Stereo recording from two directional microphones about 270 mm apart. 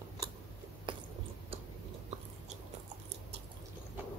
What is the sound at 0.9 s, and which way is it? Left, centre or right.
Chewing, centre.